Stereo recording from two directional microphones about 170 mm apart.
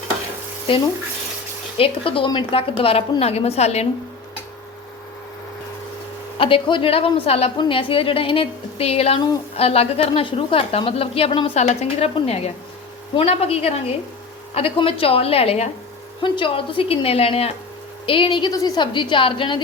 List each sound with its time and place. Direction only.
1.8 s a woman's voice: 30° left (ahead or behind)
6.4 s a woman's voice: 30° left (ahead or behind)